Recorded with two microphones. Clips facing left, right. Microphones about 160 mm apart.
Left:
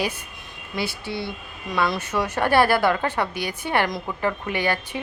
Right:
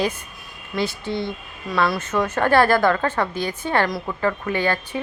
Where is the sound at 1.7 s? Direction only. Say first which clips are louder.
Right 2 dB; 20° left (ahead or behind).